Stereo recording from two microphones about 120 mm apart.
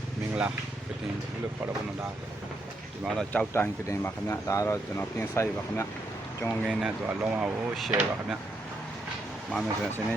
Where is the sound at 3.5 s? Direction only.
20° left (ahead or behind).